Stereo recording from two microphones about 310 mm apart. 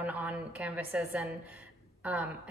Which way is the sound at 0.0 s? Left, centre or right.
Centre.